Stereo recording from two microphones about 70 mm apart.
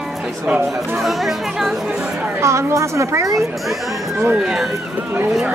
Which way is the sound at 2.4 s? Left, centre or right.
Right.